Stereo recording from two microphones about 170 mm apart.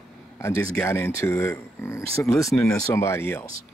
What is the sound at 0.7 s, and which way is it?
Speech, 15° left (ahead or behind).